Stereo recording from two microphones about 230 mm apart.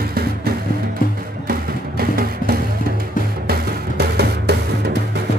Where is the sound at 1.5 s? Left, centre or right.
Right.